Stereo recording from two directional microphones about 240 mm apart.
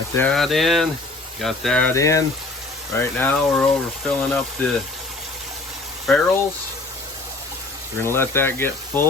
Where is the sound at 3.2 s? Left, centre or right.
Centre.